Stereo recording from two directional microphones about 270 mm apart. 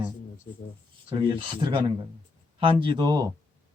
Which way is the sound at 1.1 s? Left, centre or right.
Centre.